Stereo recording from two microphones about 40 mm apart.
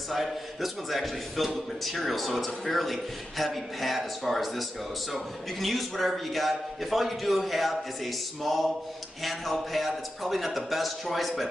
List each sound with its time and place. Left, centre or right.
0.1 s a man's voice: centre